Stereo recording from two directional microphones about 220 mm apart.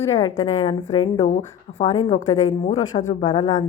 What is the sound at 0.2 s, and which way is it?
A woman's voice, 20° left (ahead or behind).